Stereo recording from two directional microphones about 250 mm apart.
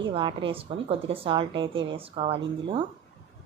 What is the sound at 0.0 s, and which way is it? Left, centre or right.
A woman's voice, centre.